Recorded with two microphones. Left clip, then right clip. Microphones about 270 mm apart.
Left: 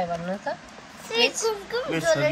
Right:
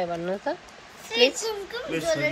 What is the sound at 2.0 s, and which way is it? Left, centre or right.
Speech, left.